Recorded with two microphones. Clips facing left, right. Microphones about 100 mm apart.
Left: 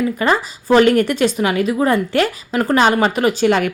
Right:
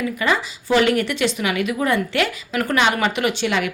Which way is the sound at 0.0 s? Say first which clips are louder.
Left 4 dB; 40° left (ahead or behind).